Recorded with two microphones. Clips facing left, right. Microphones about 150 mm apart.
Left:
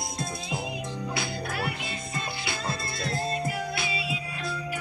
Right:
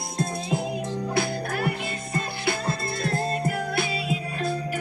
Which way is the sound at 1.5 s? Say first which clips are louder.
Right 5 dB; 50° right (ahead or behind).